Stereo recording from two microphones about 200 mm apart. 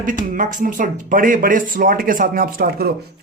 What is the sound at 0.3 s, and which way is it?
Speech, 40° right (ahead or behind).